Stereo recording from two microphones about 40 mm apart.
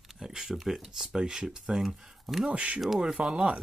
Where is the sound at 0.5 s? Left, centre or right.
Centre.